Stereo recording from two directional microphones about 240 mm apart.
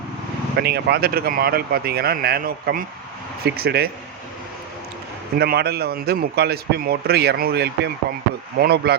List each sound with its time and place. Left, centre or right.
0.5 s a man's voice: right
5.4 s a man's voice: right